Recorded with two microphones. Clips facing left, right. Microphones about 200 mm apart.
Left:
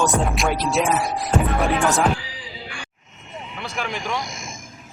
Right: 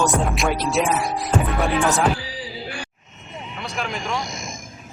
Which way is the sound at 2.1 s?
35° right (ahead or behind).